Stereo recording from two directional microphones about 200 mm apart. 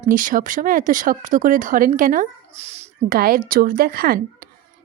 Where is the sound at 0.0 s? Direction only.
40° right (ahead or behind).